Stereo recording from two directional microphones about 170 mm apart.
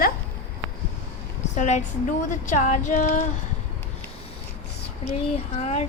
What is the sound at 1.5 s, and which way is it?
A woman's voice, 40° left (ahead or behind).